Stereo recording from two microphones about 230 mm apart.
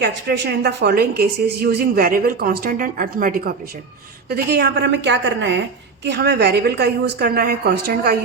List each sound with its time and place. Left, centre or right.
0.0 s a woman's voice: right